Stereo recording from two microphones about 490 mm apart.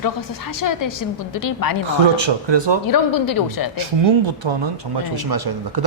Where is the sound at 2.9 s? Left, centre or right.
Left.